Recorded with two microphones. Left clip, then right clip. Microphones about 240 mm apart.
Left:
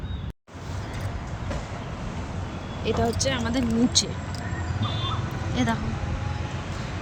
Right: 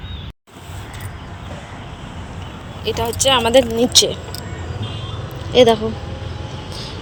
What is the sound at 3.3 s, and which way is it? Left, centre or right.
Speech, right.